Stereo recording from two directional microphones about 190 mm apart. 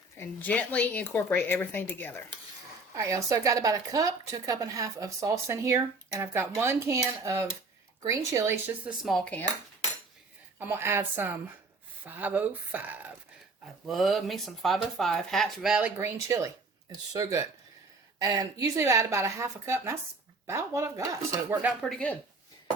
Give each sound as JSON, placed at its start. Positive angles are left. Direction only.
{"t": 0.2, "sound": "a woman's voice", "side_deg": 10}
{"t": 2.9, "sound": "speech", "side_deg": -15}
{"t": 9.0, "sound": "speech", "side_deg": 5}
{"t": 10.6, "sound": "speech", "side_deg": -10}